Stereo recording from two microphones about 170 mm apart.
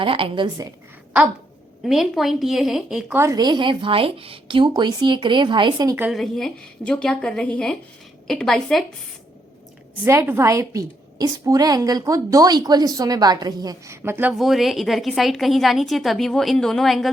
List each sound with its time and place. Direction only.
0.0 s a woman's voice: 30° right (ahead or behind)
1.8 s a woman's voice: centre (ahead or behind)
3.2 s a woman's voice: 20° right (ahead or behind)
6.0 s a woman's voice: centre (ahead or behind)
10.0 s a woman's voice: 15° right (ahead or behind)